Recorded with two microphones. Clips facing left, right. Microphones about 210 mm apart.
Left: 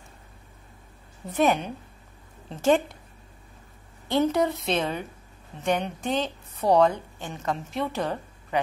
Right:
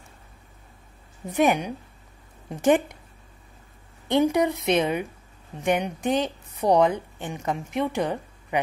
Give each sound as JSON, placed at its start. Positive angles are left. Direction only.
{"t": 1.3, "sound": "a woman's voice", "side_deg": -15}
{"t": 4.1, "sound": "a woman's voice", "side_deg": -15}